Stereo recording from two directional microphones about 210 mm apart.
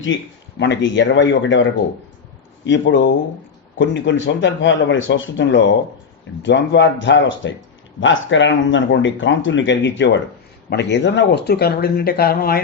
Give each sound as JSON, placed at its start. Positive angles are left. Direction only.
{"t": 0.6, "sound": "speech", "side_deg": 60}
{"t": 2.6, "sound": "speech", "side_deg": 60}